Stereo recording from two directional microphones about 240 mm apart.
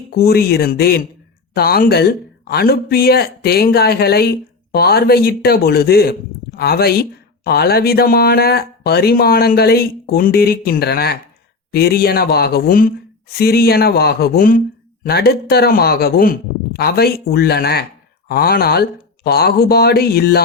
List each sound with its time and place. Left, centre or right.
0.1 s speech: left